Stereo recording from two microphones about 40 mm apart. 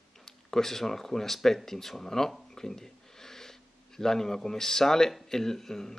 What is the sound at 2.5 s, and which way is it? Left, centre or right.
Gasp, centre.